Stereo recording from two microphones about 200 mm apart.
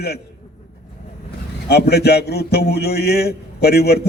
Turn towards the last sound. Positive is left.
turn(degrees=50)  # may be behind; listen again after turning